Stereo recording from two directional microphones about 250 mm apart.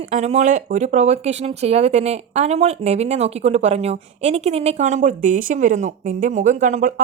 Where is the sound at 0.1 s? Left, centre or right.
Right.